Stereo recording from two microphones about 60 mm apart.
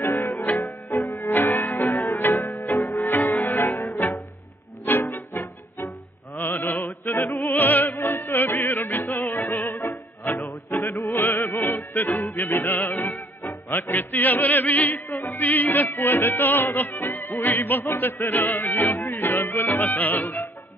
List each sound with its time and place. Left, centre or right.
0.6 s music: left